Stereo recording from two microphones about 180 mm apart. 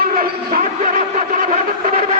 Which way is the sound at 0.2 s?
50° right (ahead or behind).